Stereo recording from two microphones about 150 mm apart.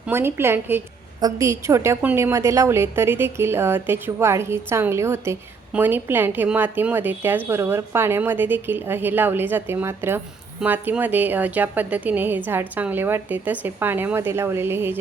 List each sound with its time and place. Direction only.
0.1 s a woman's voice: 15° right (ahead or behind)